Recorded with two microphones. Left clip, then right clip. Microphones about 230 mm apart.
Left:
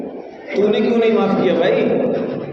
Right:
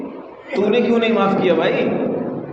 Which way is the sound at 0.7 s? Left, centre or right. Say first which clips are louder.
Even; right.